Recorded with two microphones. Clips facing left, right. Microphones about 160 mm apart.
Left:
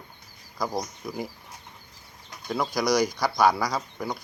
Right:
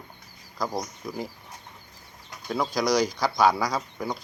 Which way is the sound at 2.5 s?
10° left (ahead or behind).